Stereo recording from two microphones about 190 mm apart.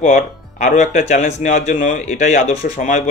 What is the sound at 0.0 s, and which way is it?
Speech, 40° left (ahead or behind).